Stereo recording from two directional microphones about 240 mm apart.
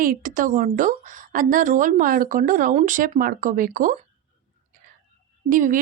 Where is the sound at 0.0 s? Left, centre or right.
Right.